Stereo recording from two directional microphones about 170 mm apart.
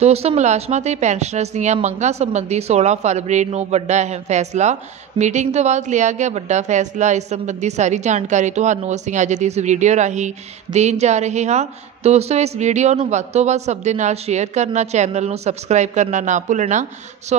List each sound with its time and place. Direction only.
0.0 s a woman's voice: 35° right (ahead or behind)